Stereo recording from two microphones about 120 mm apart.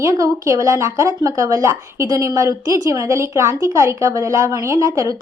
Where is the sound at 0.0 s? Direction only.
25° right (ahead or behind).